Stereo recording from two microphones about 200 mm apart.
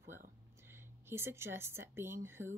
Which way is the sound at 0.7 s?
10° right (ahead or behind).